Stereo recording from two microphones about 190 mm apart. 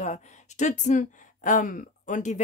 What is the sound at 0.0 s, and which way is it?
Speech, 40° left (ahead or behind).